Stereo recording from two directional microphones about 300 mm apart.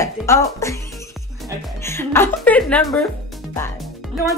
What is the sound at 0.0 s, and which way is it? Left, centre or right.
Music, centre.